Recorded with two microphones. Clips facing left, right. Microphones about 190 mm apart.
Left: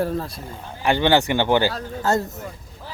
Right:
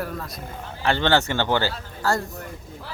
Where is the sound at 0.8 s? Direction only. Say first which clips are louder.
Left 3 dB; 15° left (ahead or behind).